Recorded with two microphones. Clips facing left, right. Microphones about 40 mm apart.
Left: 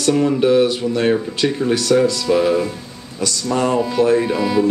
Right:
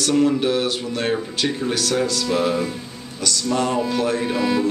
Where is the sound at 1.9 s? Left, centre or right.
Centre.